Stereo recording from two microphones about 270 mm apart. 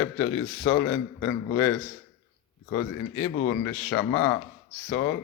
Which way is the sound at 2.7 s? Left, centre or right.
Left.